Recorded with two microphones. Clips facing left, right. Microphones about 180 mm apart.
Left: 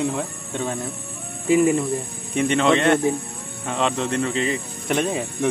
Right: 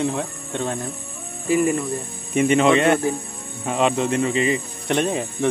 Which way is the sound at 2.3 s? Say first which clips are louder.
Right 2 dB; 5° right (ahead or behind).